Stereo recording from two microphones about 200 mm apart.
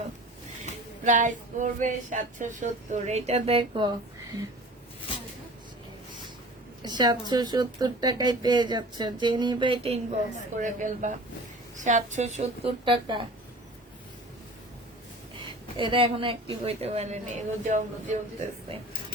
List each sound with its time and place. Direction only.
1.0 s speech: 40° right (ahead or behind)
6.8 s speech: 20° right (ahead or behind)
15.8 s speech: 25° right (ahead or behind)